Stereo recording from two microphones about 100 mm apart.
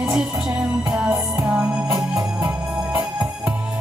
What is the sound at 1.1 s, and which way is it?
Music, 15° right (ahead or behind).